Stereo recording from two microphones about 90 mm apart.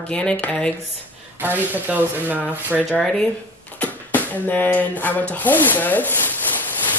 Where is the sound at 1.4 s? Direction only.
20° right (ahead or behind).